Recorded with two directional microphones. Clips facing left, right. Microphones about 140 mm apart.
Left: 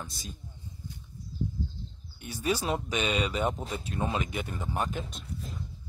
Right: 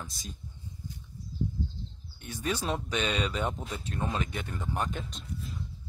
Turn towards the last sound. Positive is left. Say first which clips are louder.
# left 1 dB
turn(degrees=5)  # may be behind; listen again after turning